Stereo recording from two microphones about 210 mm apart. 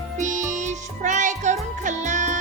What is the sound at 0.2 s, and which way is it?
Music, 35° right (ahead or behind).